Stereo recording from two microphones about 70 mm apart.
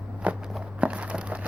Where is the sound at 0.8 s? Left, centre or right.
Centre.